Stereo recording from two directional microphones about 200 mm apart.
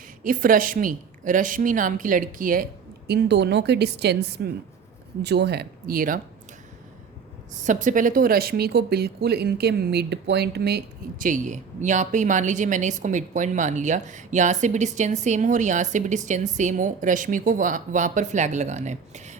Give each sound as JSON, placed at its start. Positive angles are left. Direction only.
{"t": 0.2, "sound": "a woman's voice", "side_deg": -45}
{"t": 3.1, "sound": "a woman's voice", "side_deg": -55}
{"t": 7.6, "sound": "speech", "side_deg": -40}